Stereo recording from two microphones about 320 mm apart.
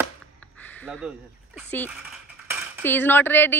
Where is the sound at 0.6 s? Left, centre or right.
Centre.